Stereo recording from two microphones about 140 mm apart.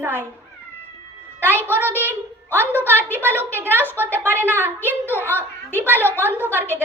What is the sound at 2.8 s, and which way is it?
A woman's voice, 15° right (ahead or behind).